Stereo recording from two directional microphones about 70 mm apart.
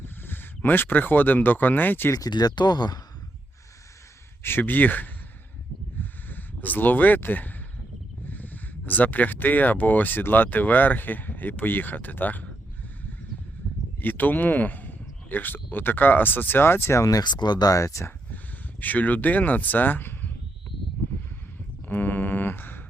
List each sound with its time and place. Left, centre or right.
0.0 s speech: left
2.1 s speech: left
4.4 s speech: left
6.0 s a sound: left
8.3 s speech: left
14.0 s speech: left
17.1 s speech: left
18.8 s speech: left
21.8 s a sound: left